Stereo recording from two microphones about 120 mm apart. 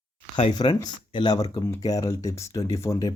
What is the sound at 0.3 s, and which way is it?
Speech, 40° left (ahead or behind).